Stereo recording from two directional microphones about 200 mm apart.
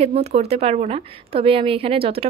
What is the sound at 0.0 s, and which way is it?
A woman's voice, 30° right (ahead or behind).